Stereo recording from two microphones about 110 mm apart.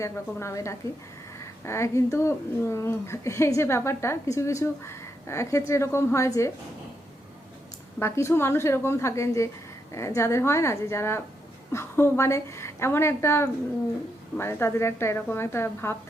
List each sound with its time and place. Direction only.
0.0 s a woman's voice: 25° left (ahead or behind)
7.9 s a woman's voice: 25° left (ahead or behind)